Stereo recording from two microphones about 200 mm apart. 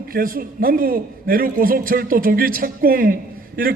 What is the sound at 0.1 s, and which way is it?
A man's voice, 45° right (ahead or behind).